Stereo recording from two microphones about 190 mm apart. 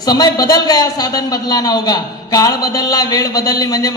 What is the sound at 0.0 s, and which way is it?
A man's voice, 20° left (ahead or behind).